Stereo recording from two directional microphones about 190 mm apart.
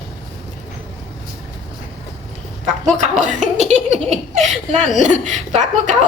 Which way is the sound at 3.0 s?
40° right (ahead or behind).